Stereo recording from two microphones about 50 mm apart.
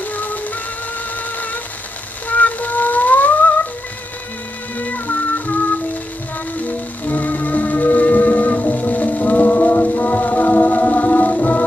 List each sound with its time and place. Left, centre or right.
0.0 s music: left
2.2 s music: left
4.7 s music: left